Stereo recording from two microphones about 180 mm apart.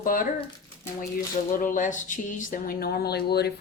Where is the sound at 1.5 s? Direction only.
50° left (ahead or behind).